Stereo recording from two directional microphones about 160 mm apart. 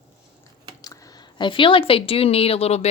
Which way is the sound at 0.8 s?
20° left (ahead or behind).